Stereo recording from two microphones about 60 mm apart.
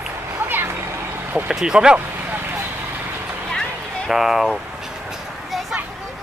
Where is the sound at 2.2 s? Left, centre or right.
Right.